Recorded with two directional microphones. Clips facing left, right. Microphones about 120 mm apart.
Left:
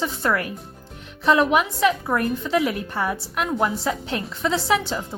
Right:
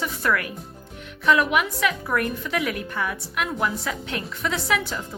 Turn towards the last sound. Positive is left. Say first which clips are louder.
# left 4 dB
turn(degrees=30)  # may be behind; listen again after turning